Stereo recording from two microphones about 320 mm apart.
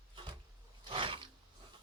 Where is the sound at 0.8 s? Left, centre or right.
Centre.